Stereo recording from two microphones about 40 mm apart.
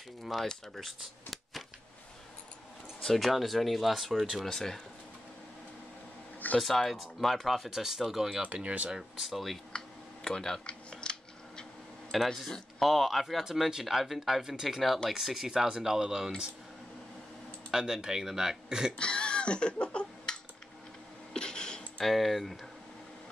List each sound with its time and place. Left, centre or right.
0.2 s speech: centre
3.2 s speech: centre
4.5 s speech: centre
6.6 s speech: centre
8.4 s speech: right
8.9 s speech: centre
9.7 s camera: centre
12.1 s speech: centre
12.4 s speech: centre
12.8 s speech: centre
17.6 s speech: centre
18.9 s a sound: left
21.4 s a sound: centre
22.0 s speech: centre